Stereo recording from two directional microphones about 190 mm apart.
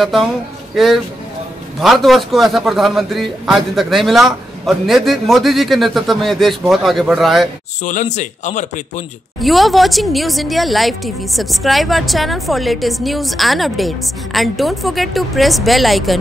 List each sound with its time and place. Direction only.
0.0 s a woman's voice: centre (ahead or behind)
7.8 s a man's voice: 40° left (ahead or behind)
9.4 s a woman's voice: centre (ahead or behind)